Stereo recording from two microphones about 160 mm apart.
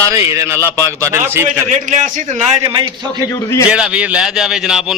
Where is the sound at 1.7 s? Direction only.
50° right (ahead or behind).